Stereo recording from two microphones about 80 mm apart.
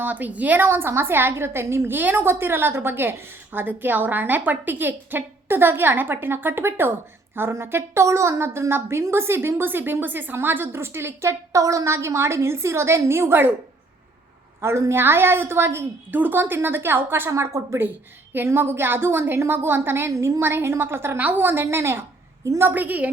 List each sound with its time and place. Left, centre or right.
0.0 s a woman's voice: right
14.6 s a woman's voice: right
18.3 s a woman's voice: right